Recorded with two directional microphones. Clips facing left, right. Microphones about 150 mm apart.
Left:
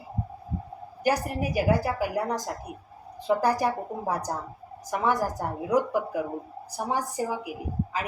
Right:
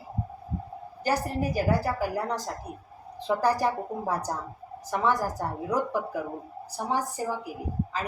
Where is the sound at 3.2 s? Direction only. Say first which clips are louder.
Left 1 dB; 10° left (ahead or behind).